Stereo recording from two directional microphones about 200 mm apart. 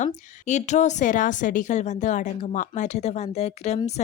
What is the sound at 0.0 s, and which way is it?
A woman's voice, 35° left (ahead or behind).